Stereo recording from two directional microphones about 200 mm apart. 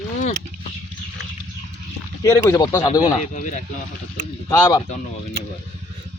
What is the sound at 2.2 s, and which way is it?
Speech, 15° left (ahead or behind).